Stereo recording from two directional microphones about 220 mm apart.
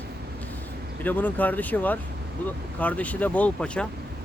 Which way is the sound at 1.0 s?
10° left (ahead or behind).